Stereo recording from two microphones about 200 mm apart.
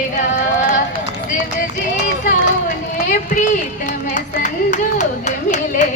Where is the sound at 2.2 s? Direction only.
40° left (ahead or behind).